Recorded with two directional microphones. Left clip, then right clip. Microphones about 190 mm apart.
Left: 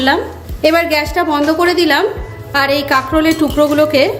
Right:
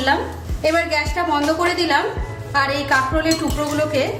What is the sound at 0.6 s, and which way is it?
A woman's voice, 45° left (ahead or behind).